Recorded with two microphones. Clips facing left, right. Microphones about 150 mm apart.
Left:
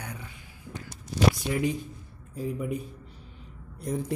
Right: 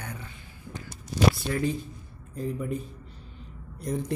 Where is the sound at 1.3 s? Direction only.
15° left (ahead or behind).